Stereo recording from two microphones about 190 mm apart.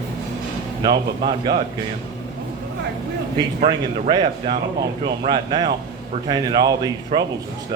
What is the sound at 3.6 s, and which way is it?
Speech, 25° right (ahead or behind).